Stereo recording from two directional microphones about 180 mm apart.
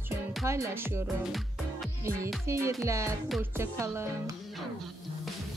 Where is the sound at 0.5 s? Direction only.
15° right (ahead or behind).